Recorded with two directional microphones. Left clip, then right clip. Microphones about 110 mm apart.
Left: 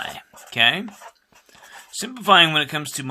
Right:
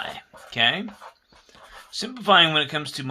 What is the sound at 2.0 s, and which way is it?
Speech, 30° left (ahead or behind).